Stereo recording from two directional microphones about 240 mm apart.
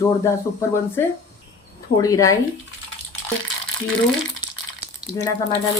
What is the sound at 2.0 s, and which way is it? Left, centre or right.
Speech, centre.